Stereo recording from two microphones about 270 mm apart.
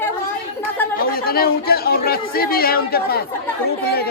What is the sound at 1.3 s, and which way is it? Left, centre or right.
Speech, left.